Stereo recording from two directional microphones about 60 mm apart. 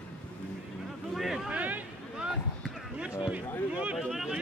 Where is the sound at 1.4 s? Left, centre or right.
Right.